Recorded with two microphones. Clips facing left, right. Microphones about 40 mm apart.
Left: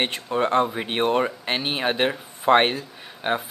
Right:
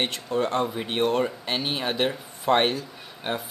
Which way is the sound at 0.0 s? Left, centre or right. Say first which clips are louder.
Left 2 dB; left.